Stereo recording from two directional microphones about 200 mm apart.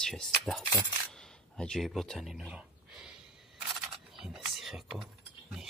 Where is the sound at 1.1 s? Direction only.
Centre (ahead or behind).